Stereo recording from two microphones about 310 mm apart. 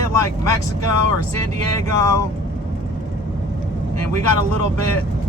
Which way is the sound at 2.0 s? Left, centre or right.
Right.